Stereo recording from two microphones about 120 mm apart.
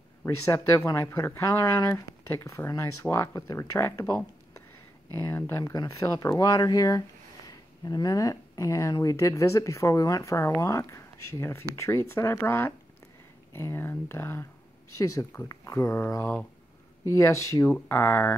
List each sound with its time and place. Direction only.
0.2 s speech: 25° left (ahead or behind)
17.6 s speech: 10° left (ahead or behind)